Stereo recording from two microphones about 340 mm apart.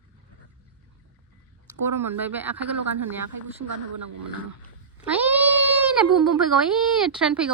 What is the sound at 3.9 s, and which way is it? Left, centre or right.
Speech, right.